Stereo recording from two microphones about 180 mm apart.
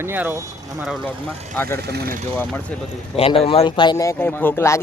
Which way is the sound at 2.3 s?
10° left (ahead or behind).